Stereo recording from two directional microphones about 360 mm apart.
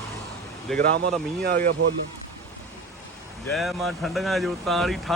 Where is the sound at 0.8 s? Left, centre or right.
Right.